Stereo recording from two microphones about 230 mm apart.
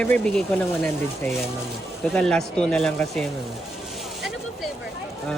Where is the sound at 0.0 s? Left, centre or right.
Centre.